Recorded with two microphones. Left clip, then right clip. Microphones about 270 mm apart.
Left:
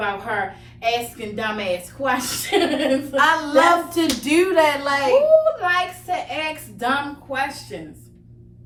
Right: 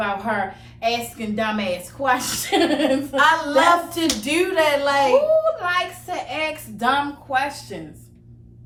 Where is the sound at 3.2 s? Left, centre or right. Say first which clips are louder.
Even; centre.